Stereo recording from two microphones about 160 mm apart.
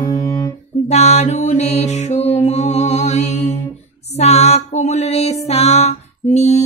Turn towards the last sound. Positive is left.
turn(degrees=45)  # may be behind; listen again after turning